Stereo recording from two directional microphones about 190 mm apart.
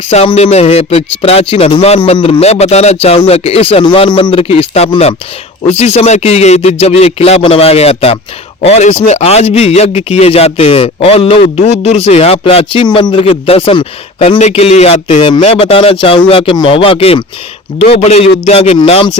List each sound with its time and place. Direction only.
0.1 s a man's voice: 35° left (ahead or behind)